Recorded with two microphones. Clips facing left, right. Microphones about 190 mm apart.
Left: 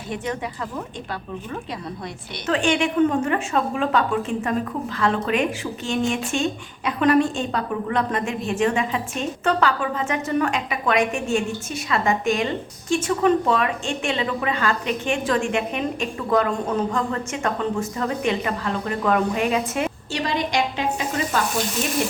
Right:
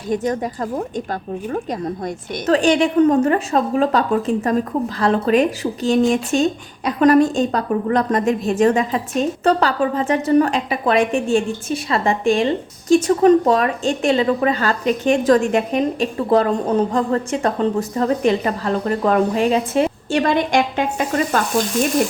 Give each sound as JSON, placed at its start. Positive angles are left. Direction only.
{"t": 0.1, "sound": "a woman's voice", "side_deg": -40}
{"t": 20.1, "sound": "speech", "side_deg": -55}